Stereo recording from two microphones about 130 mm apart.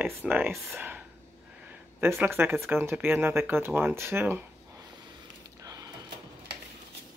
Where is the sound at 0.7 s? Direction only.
10° right (ahead or behind).